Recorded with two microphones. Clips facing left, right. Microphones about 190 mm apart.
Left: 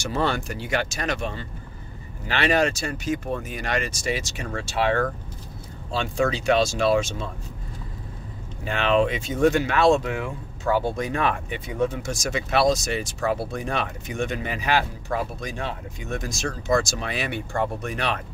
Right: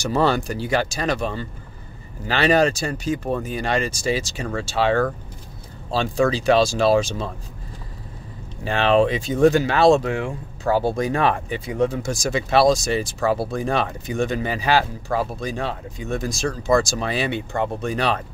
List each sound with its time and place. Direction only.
0.0 s speech: 35° right (ahead or behind)
8.6 s speech: 35° right (ahead or behind)